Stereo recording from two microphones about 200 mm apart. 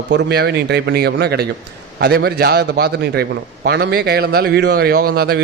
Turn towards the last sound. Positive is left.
turn(degrees=-50)  # may be behind; listen again after turning